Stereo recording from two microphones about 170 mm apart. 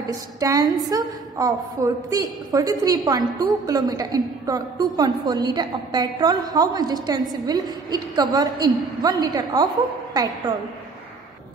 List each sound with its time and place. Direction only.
0.1 s a woman's voice: 20° right (ahead or behind)